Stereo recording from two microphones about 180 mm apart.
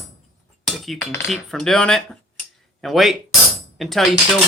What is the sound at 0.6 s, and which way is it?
Chink, centre (ahead or behind).